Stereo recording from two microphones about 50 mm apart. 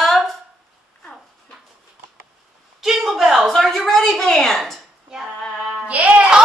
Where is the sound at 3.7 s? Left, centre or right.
Centre.